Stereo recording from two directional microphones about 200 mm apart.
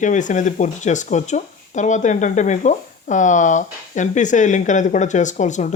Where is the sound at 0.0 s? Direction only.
40° left (ahead or behind).